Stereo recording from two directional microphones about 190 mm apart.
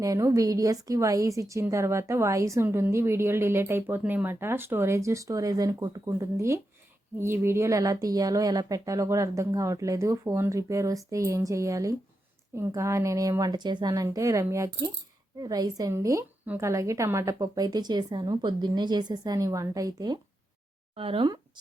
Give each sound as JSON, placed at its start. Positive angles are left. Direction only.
{"t": 0.0, "sound": "a woman's voice", "side_deg": -15}
{"t": 20.9, "sound": "a woman's voice", "side_deg": -30}